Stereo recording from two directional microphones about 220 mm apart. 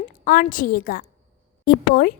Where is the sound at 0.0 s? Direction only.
40° left (ahead or behind).